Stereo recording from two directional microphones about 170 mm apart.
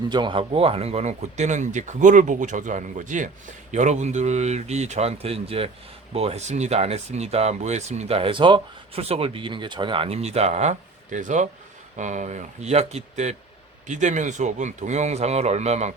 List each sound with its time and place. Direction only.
0.1 s speech: 30° right (ahead or behind)